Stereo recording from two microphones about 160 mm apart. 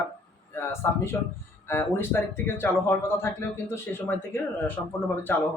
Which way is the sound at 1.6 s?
15° left (ahead or behind).